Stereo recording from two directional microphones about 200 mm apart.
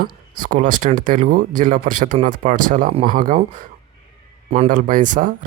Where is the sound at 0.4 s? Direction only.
40° right (ahead or behind).